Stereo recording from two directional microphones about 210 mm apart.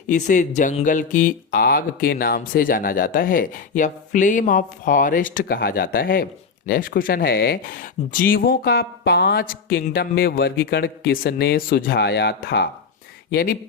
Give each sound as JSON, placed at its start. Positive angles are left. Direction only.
{"t": 0.1, "sound": "speech", "side_deg": 35}